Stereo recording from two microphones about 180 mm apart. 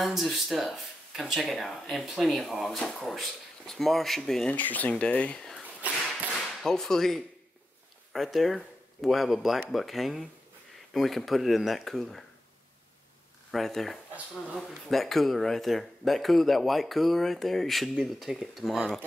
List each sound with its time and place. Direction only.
0.0 s speech: centre (ahead or behind)
13.5 s speech: centre (ahead or behind)